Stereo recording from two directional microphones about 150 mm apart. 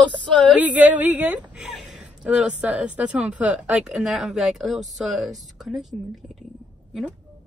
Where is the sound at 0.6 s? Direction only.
10° right (ahead or behind).